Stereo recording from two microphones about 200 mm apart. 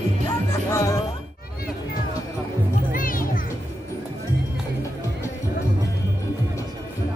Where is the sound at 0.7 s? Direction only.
15° left (ahead or behind).